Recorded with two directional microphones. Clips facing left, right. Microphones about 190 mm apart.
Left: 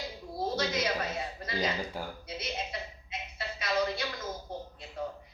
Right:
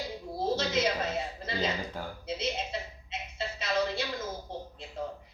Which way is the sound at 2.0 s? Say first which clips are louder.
Even; 10° left (ahead or behind).